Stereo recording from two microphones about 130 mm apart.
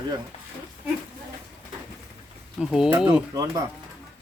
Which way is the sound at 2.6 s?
5° right (ahead or behind).